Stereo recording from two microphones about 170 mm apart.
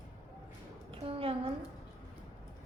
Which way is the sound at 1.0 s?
35° right (ahead or behind).